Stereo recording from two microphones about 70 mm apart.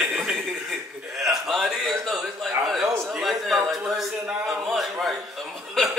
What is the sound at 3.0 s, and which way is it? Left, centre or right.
Speech, centre.